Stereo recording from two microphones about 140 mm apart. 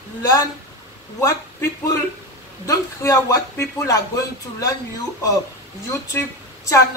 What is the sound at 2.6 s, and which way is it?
Speech, 25° left (ahead or behind).